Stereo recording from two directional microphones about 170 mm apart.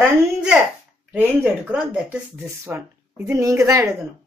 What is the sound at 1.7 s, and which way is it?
Speech, 5° right (ahead or behind).